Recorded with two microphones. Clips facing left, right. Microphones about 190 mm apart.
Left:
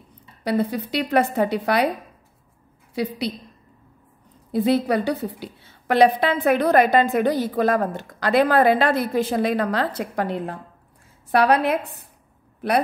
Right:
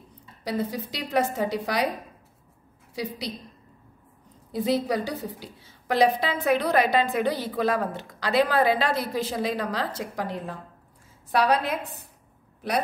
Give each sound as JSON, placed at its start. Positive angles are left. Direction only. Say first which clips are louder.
{"t": 0.4, "sound": "a woman's voice", "louder": "left 6 dB", "side_deg": 60}
{"t": 2.9, "sound": "a woman's voice", "louder": "left 7 dB", "side_deg": 60}
{"t": 4.5, "sound": "a woman's voice", "louder": "left 5 dB", "side_deg": 60}